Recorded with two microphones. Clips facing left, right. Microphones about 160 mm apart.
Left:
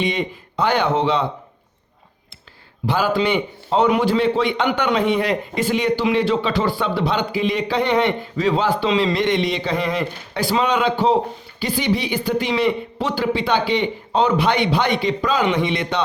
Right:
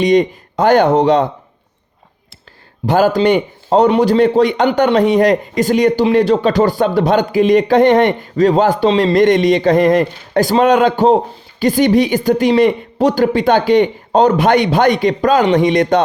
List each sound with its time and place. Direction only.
0.0 s a man's voice: 45° right (ahead or behind)
2.8 s a man's voice: 45° right (ahead or behind)